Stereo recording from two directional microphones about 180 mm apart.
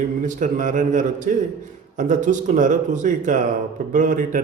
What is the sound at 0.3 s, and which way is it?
A man's voice, 45° right (ahead or behind).